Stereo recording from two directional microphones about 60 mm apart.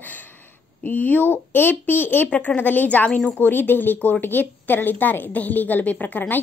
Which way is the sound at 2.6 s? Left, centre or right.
Left.